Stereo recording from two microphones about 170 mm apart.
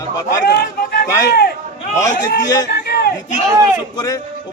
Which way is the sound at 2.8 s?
65° left (ahead or behind).